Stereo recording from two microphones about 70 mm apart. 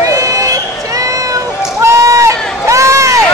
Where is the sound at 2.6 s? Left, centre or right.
Right.